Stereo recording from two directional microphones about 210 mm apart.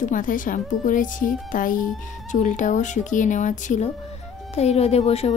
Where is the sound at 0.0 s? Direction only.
40° left (ahead or behind).